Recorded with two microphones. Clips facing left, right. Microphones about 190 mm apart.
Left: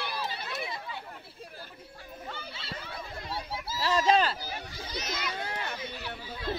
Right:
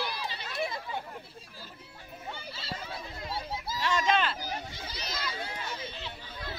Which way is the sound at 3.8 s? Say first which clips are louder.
Left 3 dB; 35° left (ahead or behind).